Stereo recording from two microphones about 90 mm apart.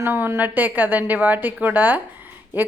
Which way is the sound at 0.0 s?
25° right (ahead or behind).